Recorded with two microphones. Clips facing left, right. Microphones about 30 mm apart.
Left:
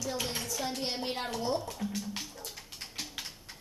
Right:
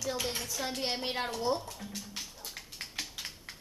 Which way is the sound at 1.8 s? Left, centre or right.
Centre.